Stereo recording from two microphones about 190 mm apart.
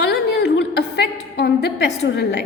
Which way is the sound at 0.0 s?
60° left (ahead or behind).